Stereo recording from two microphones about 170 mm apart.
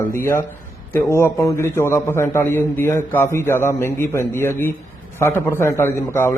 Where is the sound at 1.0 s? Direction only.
15° left (ahead or behind).